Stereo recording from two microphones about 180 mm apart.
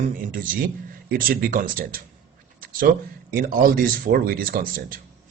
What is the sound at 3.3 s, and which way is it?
Speech, 50° right (ahead or behind).